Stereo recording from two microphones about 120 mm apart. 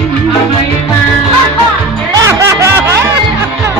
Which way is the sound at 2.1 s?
25° right (ahead or behind).